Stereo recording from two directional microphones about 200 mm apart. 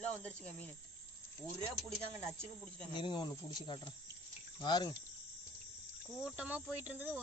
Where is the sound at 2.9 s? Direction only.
25° left (ahead or behind).